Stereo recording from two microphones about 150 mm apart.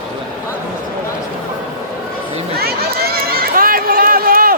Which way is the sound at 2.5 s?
90° right.